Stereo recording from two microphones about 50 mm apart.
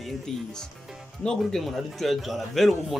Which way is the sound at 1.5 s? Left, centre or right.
Centre.